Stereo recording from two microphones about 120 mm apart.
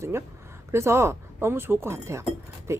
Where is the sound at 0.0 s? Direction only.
20° right (ahead or behind).